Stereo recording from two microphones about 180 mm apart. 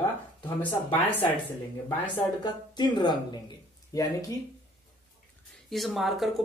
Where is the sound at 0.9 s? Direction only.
10° left (ahead or behind).